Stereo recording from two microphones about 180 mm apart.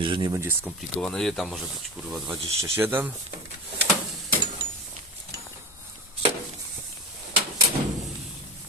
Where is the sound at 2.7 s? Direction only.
10° right (ahead or behind).